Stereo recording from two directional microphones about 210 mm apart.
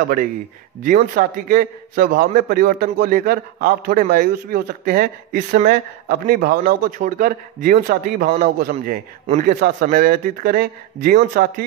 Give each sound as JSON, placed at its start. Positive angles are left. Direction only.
{"t": 0.8, "sound": "a man's voice", "side_deg": -40}